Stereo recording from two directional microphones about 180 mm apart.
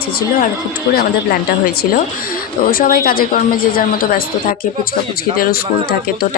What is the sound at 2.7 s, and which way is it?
A woman's voice, 55° left (ahead or behind).